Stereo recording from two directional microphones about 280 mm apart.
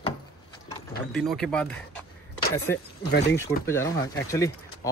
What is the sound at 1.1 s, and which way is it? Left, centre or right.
Speech, centre.